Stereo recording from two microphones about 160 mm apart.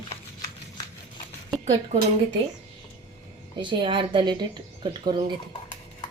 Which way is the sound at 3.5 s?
30° right (ahead or behind).